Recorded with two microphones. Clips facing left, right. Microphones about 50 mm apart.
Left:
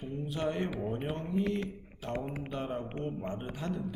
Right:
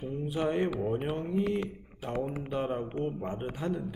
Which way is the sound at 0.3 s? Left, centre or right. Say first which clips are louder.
Right 4 dB; centre.